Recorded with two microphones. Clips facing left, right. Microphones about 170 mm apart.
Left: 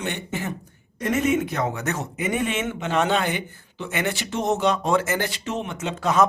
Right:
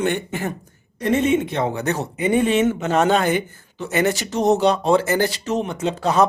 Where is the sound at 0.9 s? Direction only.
30° right (ahead or behind).